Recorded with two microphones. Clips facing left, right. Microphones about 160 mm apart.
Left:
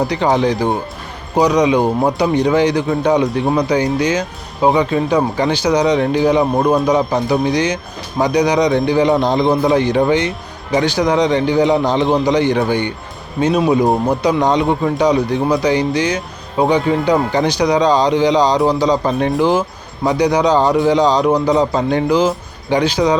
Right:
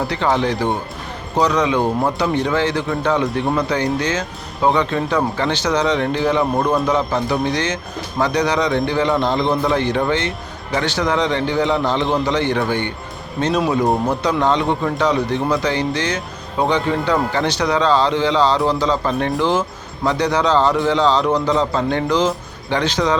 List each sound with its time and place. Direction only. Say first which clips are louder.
0.1 s speech: left 4 dB; 15° left (ahead or behind)